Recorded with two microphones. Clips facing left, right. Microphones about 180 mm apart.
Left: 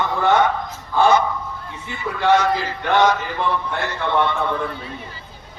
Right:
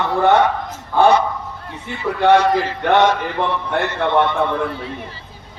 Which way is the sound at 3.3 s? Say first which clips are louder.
Right 3 dB; 60° right (ahead or behind).